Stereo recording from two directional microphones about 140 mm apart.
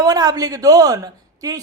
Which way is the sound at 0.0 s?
25° right (ahead or behind).